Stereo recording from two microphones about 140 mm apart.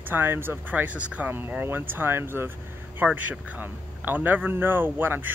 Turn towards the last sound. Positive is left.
turn(degrees=-15)  # may be behind; listen again after turning